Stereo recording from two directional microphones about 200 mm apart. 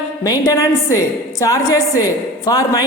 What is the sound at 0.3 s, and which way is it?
A woman's voice, 15° left (ahead or behind).